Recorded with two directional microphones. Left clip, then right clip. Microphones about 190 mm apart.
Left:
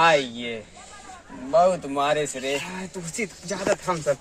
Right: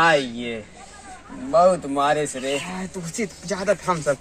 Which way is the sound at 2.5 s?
25° left (ahead or behind).